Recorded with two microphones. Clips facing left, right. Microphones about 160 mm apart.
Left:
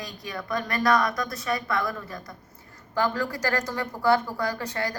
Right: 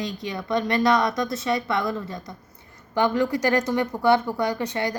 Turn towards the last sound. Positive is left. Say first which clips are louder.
# right 4 dB
turn(degrees=-20)  # may be behind; listen again after turning